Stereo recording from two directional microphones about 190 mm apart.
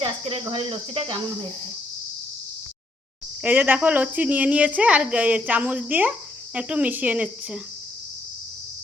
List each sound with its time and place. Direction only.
0.0 s cricket: 25° right (ahead or behind)
3.4 s speech: 10° right (ahead or behind)